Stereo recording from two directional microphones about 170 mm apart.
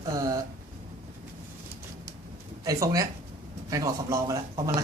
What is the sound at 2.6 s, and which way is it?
A man's voice, 20° right (ahead or behind).